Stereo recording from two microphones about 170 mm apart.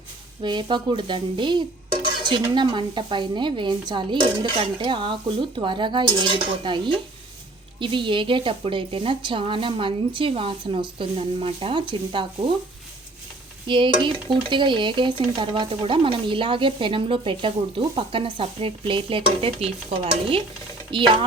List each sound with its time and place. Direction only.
0.4 s speech: 25° right (ahead or behind)
13.7 s speech: 30° right (ahead or behind)